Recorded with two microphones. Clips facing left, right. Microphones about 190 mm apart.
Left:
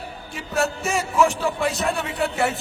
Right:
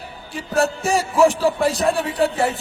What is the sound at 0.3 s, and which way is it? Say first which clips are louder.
A man's voice: right 4 dB; 35° right (ahead or behind).